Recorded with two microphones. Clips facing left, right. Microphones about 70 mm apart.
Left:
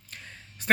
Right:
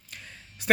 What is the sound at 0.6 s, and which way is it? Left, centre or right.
Speech, left.